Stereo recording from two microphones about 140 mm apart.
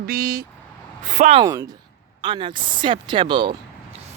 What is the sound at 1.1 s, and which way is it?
Speech, 55° right (ahead or behind).